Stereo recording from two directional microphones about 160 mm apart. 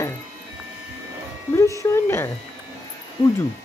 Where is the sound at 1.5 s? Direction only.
20° left (ahead or behind).